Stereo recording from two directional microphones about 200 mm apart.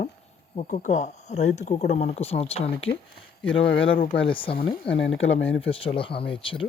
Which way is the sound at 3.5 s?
75° left (ahead or behind).